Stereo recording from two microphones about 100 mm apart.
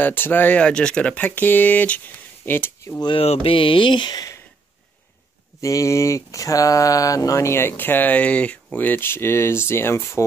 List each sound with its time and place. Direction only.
0.0 s speech: 20° left (ahead or behind)
3.2 s speech: 70° left (ahead or behind); by 4.4 s 45° left (ahead or behind)
5.6 s speech: 30° left (ahead or behind)